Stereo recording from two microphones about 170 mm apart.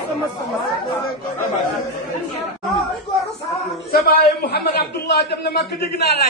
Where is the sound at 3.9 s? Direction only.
65° left (ahead or behind).